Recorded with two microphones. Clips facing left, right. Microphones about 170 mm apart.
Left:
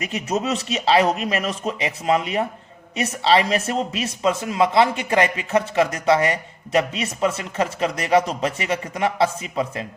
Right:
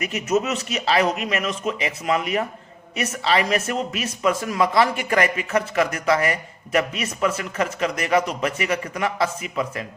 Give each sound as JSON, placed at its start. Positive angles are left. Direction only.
{"t": 0.0, "sound": "speech", "side_deg": 30}